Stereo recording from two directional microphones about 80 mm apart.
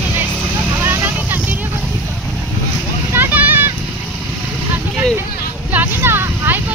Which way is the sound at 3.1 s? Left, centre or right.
Right.